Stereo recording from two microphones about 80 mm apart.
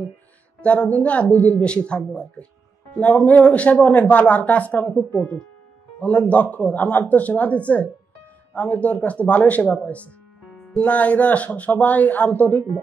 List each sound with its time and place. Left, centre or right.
0.6 s speech: centre